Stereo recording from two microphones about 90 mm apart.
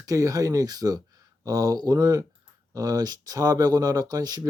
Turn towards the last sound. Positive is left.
turn(degrees=-45)  # may be behind; listen again after turning